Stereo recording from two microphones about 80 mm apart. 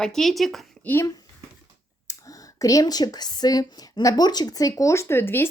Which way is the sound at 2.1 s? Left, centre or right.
Left.